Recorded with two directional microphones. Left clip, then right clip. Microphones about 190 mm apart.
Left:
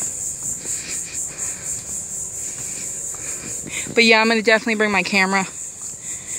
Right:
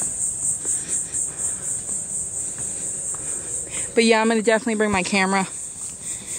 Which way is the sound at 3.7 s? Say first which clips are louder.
Left 4 dB; 10° right (ahead or behind).